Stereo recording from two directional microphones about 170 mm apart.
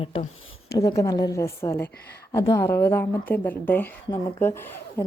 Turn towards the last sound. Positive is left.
turn(degrees=15)  # may be behind; listen again after turning